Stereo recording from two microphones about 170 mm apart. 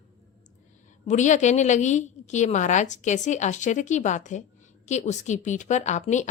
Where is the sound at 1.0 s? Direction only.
45° left (ahead or behind).